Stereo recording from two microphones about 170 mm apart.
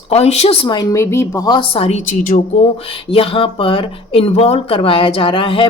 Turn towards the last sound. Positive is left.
turn(degrees=30)  # may be behind; listen again after turning